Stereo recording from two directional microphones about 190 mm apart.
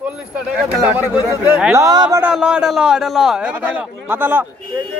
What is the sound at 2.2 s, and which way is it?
A man's voice, 5° right (ahead or behind).